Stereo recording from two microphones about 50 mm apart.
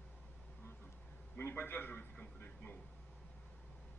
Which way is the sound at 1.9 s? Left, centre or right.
Left.